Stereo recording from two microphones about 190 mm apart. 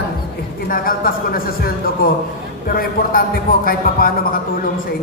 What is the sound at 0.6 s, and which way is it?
A man's voice, 50° left (ahead or behind).